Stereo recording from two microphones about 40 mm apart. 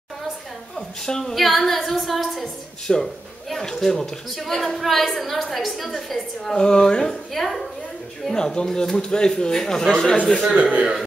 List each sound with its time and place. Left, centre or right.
0.7 s a woman's voice: centre
2.4 s a woman's voice: centre
6.5 s speech: centre
7.1 s a woman's voice: centre
8.3 s speech: centre
10.5 s a man's voice: right